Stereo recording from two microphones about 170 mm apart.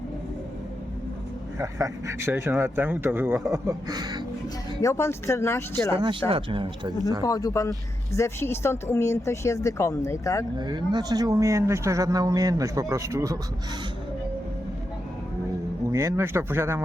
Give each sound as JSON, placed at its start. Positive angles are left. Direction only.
{"t": 1.5, "sound": "speech", "side_deg": -20}
{"t": 4.8, "sound": "speech", "side_deg": 15}
{"t": 6.0, "sound": "speech", "side_deg": -30}
{"t": 7.2, "sound": "speech", "side_deg": 20}
{"t": 10.6, "sound": "speech", "side_deg": -25}
{"t": 15.9, "sound": "speech", "side_deg": -15}